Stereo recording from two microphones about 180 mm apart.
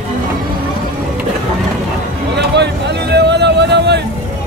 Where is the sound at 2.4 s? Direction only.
70° right (ahead or behind).